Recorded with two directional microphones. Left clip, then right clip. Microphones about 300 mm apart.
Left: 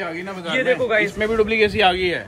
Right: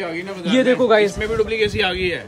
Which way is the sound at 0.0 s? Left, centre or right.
Centre.